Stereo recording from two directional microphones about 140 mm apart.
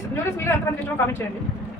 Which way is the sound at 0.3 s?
20° left (ahead or behind).